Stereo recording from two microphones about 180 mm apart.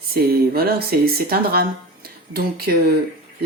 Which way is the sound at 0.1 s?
60° right (ahead or behind).